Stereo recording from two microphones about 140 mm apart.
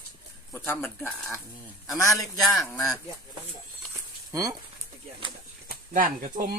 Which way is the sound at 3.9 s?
25° right (ahead or behind).